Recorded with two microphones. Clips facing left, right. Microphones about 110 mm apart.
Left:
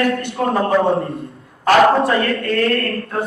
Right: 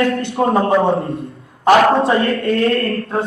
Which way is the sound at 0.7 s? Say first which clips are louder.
Right 1 dB; centre (ahead or behind).